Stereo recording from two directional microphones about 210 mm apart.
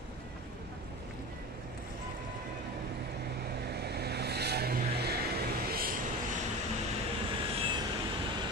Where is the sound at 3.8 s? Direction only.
50° right (ahead or behind).